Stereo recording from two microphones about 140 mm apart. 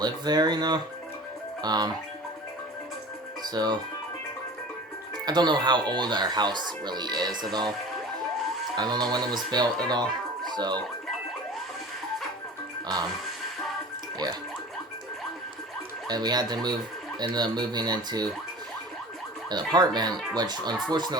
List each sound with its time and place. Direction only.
0.0 s speech: 30° right (ahead or behind)
3.4 s speech: 30° right (ahead or behind)
5.2 s speech: 30° right (ahead or behind)
8.7 s speech: 30° right (ahead or behind)
16.0 s speech: 30° right (ahead or behind)
19.5 s speech: 30° right (ahead or behind)